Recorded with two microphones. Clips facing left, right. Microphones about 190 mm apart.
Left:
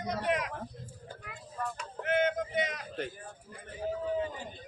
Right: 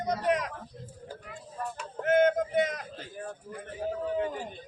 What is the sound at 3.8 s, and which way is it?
Speech, 65° right (ahead or behind).